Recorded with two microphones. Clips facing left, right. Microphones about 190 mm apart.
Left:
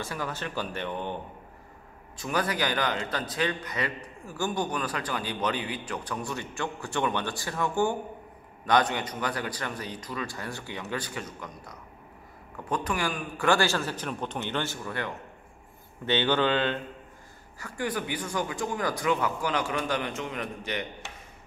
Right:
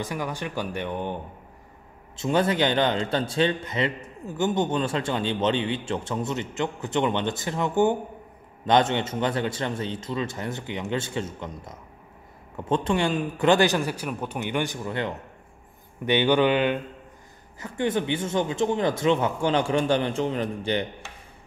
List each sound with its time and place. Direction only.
0.0 s speech: 15° right (ahead or behind)
2.1 s a man's voice: 25° right (ahead or behind)